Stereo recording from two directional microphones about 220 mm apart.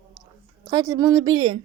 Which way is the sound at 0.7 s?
15° right (ahead or behind).